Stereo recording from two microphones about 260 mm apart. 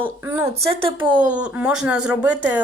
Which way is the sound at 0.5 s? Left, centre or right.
Right.